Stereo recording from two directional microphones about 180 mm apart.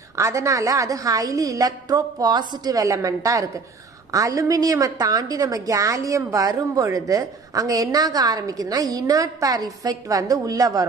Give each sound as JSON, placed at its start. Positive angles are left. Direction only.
{"t": 0.1, "sound": "a woman's voice", "side_deg": -15}